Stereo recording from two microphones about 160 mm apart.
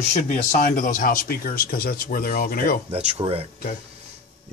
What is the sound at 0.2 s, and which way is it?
Speech, 55° left (ahead or behind).